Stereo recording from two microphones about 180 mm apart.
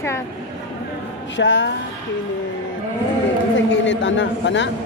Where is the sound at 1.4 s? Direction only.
90° left.